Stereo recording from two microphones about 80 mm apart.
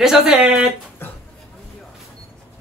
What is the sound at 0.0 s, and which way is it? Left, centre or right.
Speech, centre.